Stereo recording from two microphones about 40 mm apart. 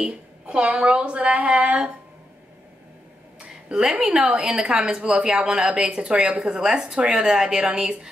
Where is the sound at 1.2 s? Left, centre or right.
Right.